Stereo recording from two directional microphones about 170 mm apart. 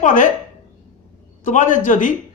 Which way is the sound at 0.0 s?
50° left (ahead or behind).